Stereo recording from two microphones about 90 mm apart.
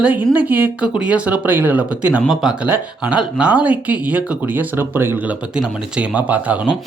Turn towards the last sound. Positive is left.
turn(degrees=-15)  # may be behind; listen again after turning